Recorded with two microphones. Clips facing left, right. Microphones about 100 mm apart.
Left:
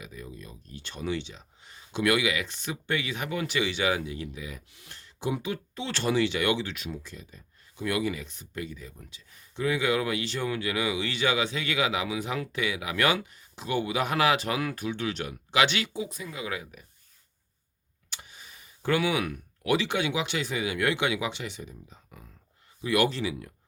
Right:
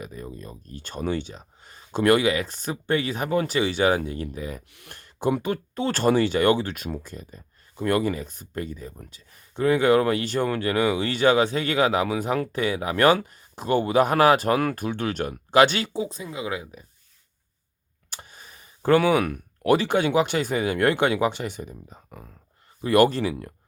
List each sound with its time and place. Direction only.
0.0 s speech: 45° right (ahead or behind)
4.7 s speech: 55° right (ahead or behind); by 16.8 s 25° right (ahead or behind)
18.1 s speech: 45° right (ahead or behind)